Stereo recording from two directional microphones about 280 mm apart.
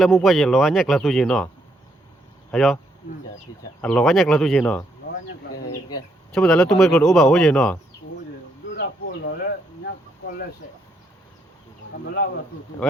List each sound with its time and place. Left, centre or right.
0.0 s speech: centre
2.5 s speech: centre
3.8 s speech: centre
6.3 s speech: centre
8.7 s a sound: left